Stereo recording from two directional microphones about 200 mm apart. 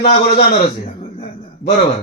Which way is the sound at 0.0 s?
30° left (ahead or behind).